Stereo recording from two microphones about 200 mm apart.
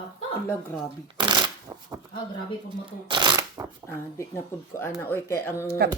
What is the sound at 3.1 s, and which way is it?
Speech, 20° right (ahead or behind).